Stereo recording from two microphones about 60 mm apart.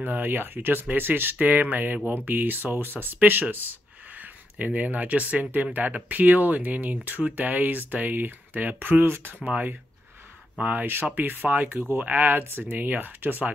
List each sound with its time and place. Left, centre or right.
0.0 s speech: right
9.4 s speech: right